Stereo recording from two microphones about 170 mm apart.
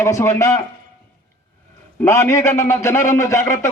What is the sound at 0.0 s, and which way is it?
Speech, 15° left (ahead or behind).